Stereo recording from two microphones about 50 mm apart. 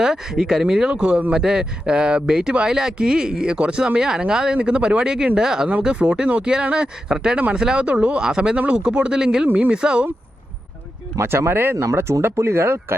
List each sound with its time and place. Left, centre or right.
0.0 s speech: centre
11.2 s speech: right
11.9 s speech: right